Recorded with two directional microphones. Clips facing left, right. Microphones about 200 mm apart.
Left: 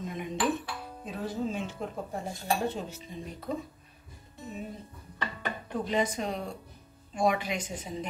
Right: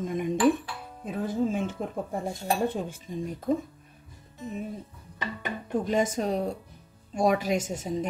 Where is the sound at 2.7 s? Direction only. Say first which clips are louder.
Right 4 dB; 50° right (ahead or behind).